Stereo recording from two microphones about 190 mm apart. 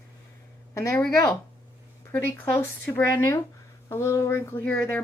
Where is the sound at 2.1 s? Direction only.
10° left (ahead or behind).